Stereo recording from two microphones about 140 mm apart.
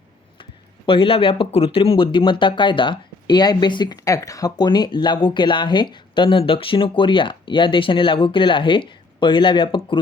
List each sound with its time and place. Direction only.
0.9 s speech: 40° left (ahead or behind)